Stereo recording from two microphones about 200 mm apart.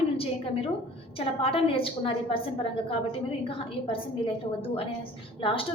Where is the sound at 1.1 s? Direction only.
30° left (ahead or behind).